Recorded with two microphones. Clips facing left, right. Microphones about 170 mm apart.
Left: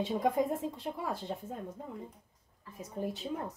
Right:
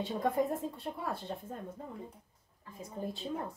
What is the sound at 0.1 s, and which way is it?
Speech, 10° left (ahead or behind).